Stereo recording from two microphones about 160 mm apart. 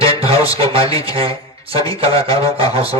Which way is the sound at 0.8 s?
20° left (ahead or behind).